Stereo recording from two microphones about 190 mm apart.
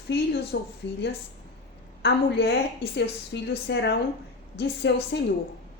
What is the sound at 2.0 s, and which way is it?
Speech, 60° left (ahead or behind).